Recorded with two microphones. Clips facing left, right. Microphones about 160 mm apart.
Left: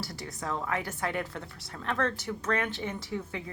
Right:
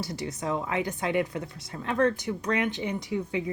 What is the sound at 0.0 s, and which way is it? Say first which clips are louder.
Speech: right 5 dB; 20° right (ahead or behind).